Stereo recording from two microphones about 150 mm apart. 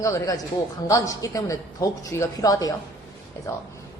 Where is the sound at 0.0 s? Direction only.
20° left (ahead or behind).